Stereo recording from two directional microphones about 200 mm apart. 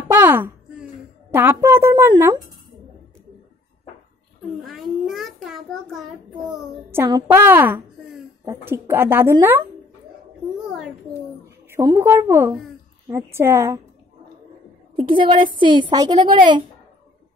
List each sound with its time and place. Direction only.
0.1 s a sound: 10° right (ahead or behind)
1.3 s a woman's voice: 10° right (ahead or behind)
4.6 s a child's voice: centre (ahead or behind)
6.9 s a woman's voice: 15° right (ahead or behind)
11.4 s a woman's voice: 15° right (ahead or behind)
15.0 s a woman's voice: 25° right (ahead or behind)